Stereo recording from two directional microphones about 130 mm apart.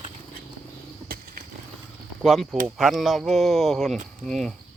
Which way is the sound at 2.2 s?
Centre (ahead or behind).